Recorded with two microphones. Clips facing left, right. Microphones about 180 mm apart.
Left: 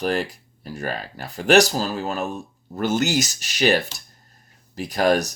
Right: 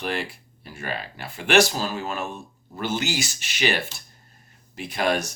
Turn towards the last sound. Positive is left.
turn(degrees=40)  # may be behind; listen again after turning